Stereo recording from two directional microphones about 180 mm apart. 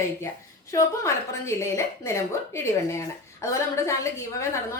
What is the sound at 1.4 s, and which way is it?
A woman's voice, 15° left (ahead or behind).